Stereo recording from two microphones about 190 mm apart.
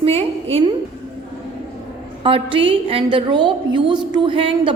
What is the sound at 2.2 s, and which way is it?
A woman's voice, 30° right (ahead or behind).